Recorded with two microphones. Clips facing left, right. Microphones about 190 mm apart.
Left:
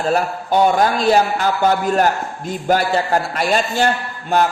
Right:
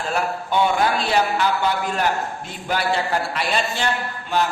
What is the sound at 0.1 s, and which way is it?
A man's voice, 40° left (ahead or behind).